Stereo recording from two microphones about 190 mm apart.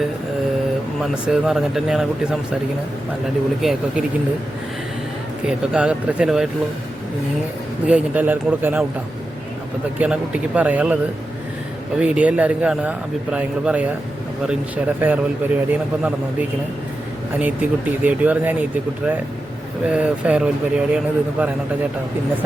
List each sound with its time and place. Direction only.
1.1 s speech: 5° right (ahead or behind)
3.6 s speech: centre (ahead or behind)
5.5 s speech: 5° right (ahead or behind)
7.9 s speech: 5° right (ahead or behind)
10.0 s speech: 5° right (ahead or behind)
11.9 s speech: 5° right (ahead or behind)
15.0 s speech: 10° right (ahead or behind)
17.3 s speech: 10° right (ahead or behind)